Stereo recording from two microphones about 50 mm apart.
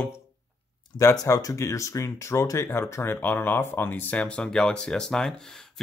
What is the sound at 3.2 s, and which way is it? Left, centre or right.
Speech, left.